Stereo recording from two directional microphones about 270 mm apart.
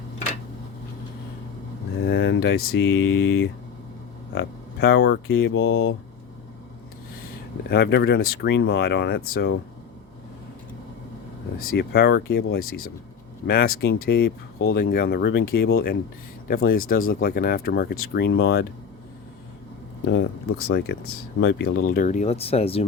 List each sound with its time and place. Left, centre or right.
2.0 s speech: left
5.5 s speech: left
7.7 s speech: left
11.6 s speech: left
20.1 s speech: left